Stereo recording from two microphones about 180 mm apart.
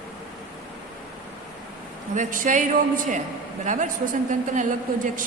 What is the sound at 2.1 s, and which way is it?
Speech, 45° right (ahead or behind).